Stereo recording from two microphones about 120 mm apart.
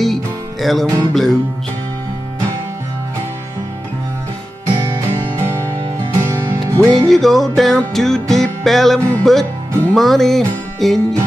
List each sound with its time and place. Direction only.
0.0 s music: centre (ahead or behind)
5.4 s music: 25° right (ahead or behind)
7.1 s music: centre (ahead or behind)